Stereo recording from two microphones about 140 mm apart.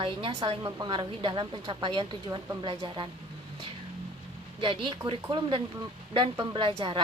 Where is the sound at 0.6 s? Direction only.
25° right (ahead or behind).